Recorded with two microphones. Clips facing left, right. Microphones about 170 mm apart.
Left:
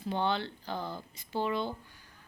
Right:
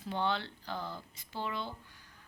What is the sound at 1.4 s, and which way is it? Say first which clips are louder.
Speech: left 7 dB; 50° left (ahead or behind).